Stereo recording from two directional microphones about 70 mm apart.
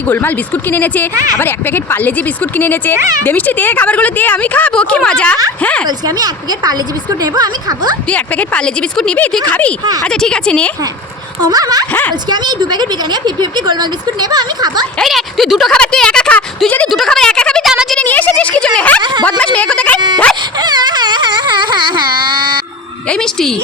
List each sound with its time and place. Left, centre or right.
0.1 s speech: left
5.8 s a woman's voice: right
8.1 s speech: centre
10.1 s speech: centre
11.4 s speech: right
12.3 s a woman's voice: right
15.0 s a woman's voice: centre
15.7 s speech: centre
17.1 s a sound: centre
17.6 s a sound: centre
18.0 s speech: left
20.6 s a sound: right
23.0 s speech: centre